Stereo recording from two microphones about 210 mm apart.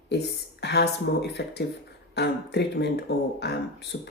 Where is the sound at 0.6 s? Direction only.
50° left (ahead or behind).